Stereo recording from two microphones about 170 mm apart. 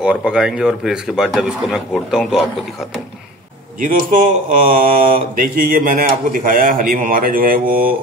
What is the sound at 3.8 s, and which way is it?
Speech, 50° right (ahead or behind).